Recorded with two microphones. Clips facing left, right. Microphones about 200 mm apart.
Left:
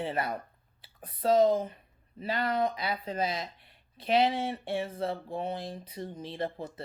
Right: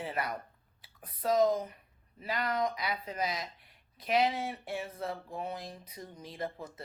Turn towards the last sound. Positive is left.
turn(degrees=30)  # may be behind; listen again after turning